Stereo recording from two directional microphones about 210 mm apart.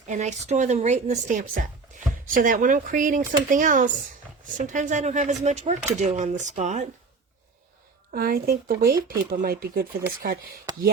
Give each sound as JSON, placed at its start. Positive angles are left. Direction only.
{"t": 0.1, "sound": "speech", "side_deg": -35}
{"t": 8.1, "sound": "speech", "side_deg": -45}